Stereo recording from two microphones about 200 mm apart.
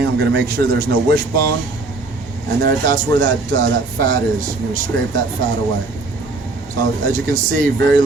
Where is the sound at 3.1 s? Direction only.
45° right (ahead or behind).